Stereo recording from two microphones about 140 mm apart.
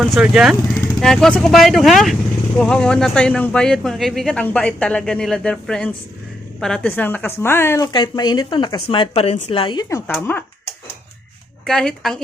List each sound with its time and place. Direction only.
0.0 s speech: 5° right (ahead or behind); by 9.8 s 35° left (ahead or behind)
10.2 s speech: 10° left (ahead or behind)
11.6 s speech: 5° left (ahead or behind)